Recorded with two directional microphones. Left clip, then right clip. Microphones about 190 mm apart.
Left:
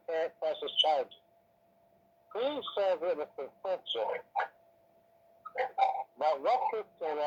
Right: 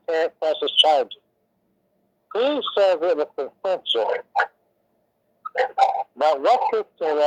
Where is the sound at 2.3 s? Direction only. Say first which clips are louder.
Right 12 dB; 60° right (ahead or behind).